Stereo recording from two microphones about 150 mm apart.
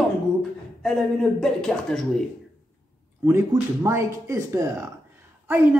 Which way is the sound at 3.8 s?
20° right (ahead or behind).